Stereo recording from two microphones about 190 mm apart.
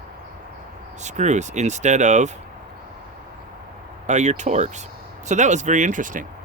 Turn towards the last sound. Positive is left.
turn(degrees=-45)  # may be behind; listen again after turning